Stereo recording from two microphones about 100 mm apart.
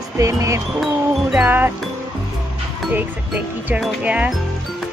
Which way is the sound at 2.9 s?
15° right (ahead or behind).